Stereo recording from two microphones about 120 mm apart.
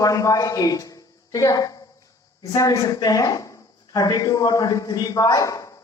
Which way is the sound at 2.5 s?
30° left (ahead or behind).